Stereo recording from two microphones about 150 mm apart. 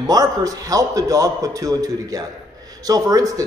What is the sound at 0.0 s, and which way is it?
A man's voice, 25° right (ahead or behind).